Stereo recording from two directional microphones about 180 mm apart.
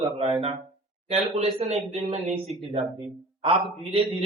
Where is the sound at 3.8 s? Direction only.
30° right (ahead or behind).